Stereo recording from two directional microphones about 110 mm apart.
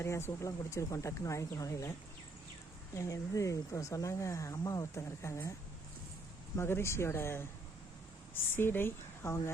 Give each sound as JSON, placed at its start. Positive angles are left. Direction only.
{"t": 0.0, "sound": "speech", "side_deg": 25}
{"t": 2.9, "sound": "speech", "side_deg": 30}
{"t": 6.6, "sound": "speech", "side_deg": 25}